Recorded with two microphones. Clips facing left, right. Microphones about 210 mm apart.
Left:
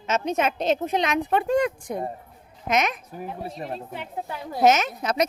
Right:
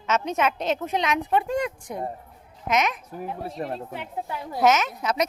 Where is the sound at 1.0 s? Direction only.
45° left (ahead or behind).